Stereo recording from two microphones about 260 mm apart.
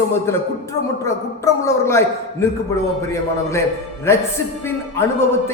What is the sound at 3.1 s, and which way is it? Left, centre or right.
Speech, centre.